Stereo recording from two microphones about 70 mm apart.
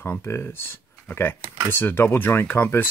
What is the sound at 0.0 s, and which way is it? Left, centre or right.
Speech, left.